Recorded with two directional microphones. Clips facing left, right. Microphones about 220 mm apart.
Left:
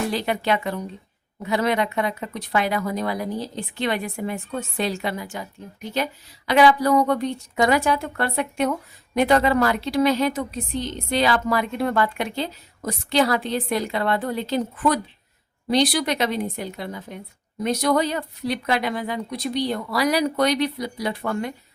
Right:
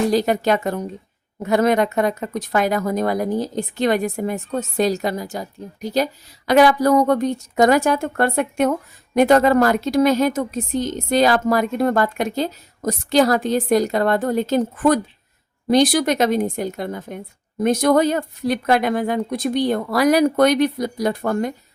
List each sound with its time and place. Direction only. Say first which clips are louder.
0.1 s a woman's voice: right 6 dB; 40° right (ahead or behind)